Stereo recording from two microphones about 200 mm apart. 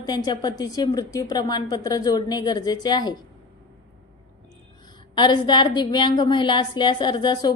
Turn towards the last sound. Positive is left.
turn(degrees=20)  # may be behind; listen again after turning